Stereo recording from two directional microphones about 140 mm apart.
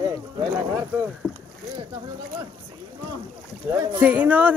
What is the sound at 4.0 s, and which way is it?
Speech, 10° right (ahead or behind).